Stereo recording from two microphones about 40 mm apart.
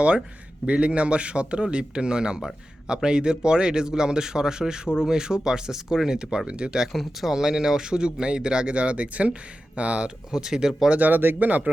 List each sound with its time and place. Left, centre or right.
0.7 s speech: right
6.9 s speech: centre; by 10.1 s right
10.3 s speech: centre
11.0 s speech: right